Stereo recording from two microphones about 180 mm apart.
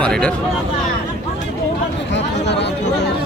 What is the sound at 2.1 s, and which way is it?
Chatter, 75° left (ahead or behind).